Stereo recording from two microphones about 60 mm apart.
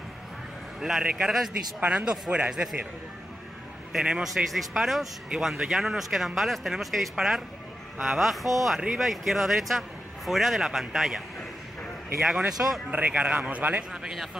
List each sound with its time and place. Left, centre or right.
0.7 s a man's voice: centre
1.0 s a man's voice: centre
3.9 s a man's voice: centre
5.6 s a man's voice: centre
12.2 s a man's voice: centre
12.9 s speech: right